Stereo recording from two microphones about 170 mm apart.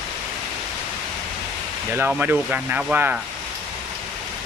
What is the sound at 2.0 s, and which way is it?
Speech, 10° right (ahead or behind).